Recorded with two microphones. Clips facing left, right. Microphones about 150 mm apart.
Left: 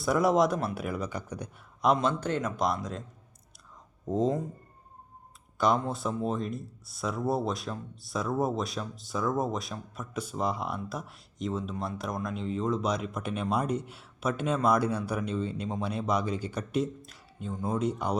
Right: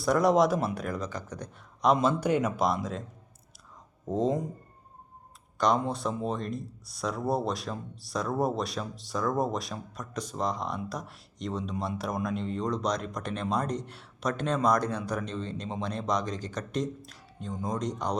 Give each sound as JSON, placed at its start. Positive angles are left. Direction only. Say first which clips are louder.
{"t": 0.0, "sound": "speech", "louder": "right 1 dB", "side_deg": 0}
{"t": 4.0, "sound": "speech", "louder": "even", "side_deg": 0}
{"t": 5.5, "sound": "speech", "louder": "even", "side_deg": 5}